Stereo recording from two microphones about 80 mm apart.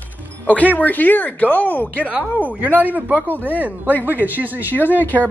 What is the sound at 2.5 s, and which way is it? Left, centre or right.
Speech, right.